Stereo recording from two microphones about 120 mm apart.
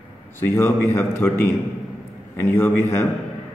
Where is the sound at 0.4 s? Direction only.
25° left (ahead or behind).